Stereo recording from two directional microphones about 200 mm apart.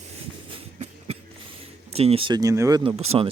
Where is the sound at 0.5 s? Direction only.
30° right (ahead or behind).